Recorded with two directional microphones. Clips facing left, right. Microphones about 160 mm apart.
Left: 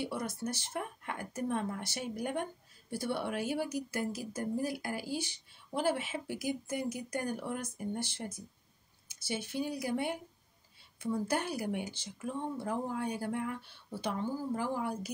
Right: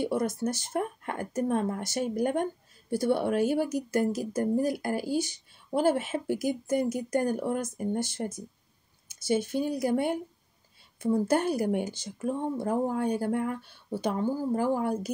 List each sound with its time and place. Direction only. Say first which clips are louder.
0.0 s a woman's voice: right 8 dB; 45° right (ahead or behind)